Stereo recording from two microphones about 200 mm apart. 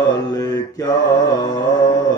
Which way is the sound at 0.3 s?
20° left (ahead or behind).